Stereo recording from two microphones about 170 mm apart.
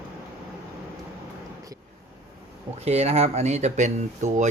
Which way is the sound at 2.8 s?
40° right (ahead or behind).